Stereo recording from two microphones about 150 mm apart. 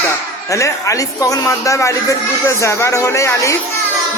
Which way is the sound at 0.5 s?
20° left (ahead or behind).